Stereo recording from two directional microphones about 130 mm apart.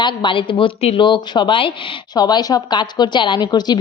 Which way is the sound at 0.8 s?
55° left (ahead or behind).